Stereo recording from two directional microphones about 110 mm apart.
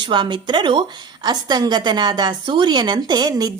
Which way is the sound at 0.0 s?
45° right (ahead or behind).